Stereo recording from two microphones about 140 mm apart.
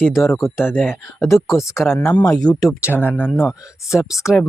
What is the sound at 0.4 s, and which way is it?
Speech, 15° left (ahead or behind).